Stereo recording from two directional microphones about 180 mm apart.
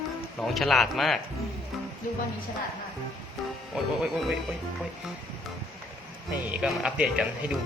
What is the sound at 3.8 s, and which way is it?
Speech, 5° right (ahead or behind).